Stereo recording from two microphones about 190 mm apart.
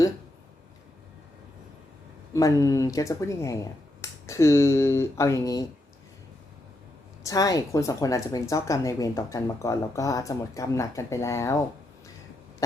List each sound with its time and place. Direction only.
2.3 s a woman's voice: 15° left (ahead or behind)
7.3 s a woman's voice: 20° left (ahead or behind)